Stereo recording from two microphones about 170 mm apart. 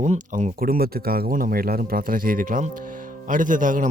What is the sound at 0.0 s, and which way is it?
Speech, 45° right (ahead or behind).